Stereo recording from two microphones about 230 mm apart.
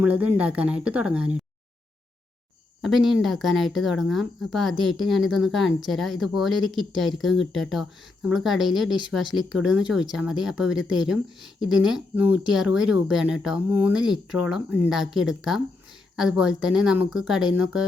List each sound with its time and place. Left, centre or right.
0.0 s speech: centre
2.8 s speech: centre